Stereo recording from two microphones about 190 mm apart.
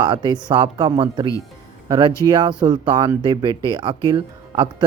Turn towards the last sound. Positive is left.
turn(degrees=-25)  # may be behind; listen again after turning